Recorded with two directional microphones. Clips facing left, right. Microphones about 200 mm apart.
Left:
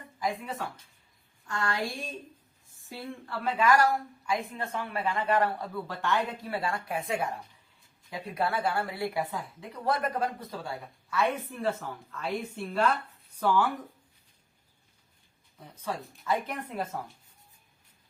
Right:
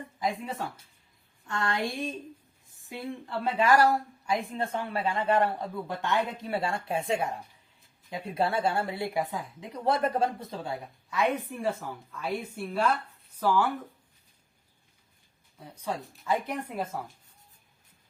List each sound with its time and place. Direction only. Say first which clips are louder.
0.2 s speech: right 1 dB; 25° right (ahead or behind); by 13.7 s 5° right (ahead or behind)
15.5 s speech: right 1 dB; 10° right (ahead or behind)